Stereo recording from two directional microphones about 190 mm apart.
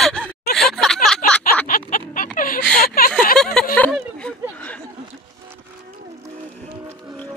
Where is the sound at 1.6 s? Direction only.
45° left (ahead or behind).